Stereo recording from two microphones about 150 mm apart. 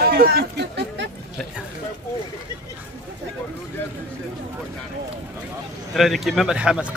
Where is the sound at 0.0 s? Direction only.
90° right.